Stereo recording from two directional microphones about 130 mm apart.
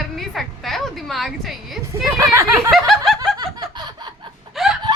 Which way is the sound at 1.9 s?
20° right (ahead or behind).